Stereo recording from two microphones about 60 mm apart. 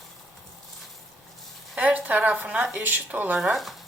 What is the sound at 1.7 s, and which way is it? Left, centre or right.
Speech, right.